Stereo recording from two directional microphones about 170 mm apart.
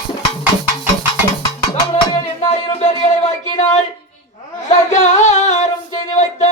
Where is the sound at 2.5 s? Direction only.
40° left (ahead or behind).